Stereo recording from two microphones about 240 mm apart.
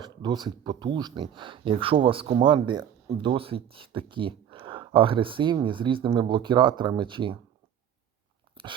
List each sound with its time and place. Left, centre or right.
0.0 s speech: centre
8.5 s biting: right